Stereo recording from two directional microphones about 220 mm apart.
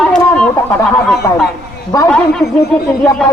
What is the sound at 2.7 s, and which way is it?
Speech, 5° left (ahead or behind).